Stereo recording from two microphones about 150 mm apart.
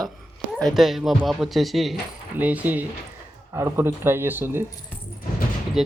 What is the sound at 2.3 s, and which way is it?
Speech, 10° right (ahead or behind).